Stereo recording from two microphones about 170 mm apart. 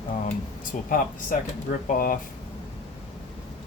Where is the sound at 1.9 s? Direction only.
55° left (ahead or behind).